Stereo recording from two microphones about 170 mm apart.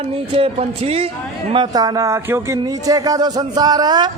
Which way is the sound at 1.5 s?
25° right (ahead or behind).